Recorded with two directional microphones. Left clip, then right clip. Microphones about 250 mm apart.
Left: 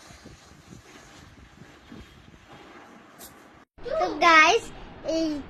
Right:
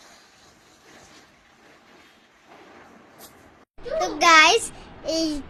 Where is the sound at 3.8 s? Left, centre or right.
Centre.